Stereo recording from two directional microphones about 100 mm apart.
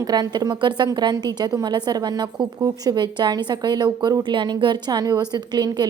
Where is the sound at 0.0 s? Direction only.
40° right (ahead or behind).